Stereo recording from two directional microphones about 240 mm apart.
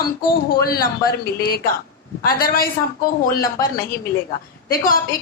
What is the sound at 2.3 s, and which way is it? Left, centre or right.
Speech, left.